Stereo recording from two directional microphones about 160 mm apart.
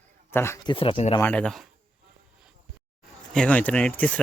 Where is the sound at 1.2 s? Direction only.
10° left (ahead or behind).